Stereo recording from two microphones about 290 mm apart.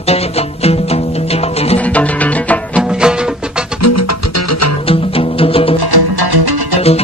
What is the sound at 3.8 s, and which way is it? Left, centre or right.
Music, left.